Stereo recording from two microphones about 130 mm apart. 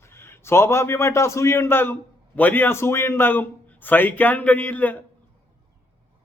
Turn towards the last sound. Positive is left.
turn(degrees=15)  # may be behind; listen again after turning